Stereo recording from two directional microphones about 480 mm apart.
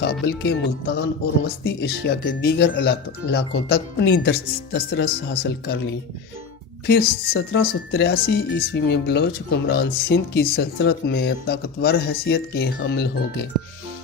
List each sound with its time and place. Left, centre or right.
0.0 s speech: centre